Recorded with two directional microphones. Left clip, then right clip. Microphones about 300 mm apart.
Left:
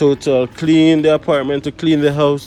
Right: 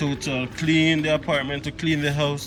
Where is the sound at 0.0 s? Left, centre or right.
Centre.